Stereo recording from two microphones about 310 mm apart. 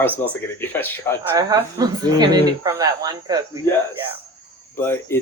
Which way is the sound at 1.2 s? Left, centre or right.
Centre.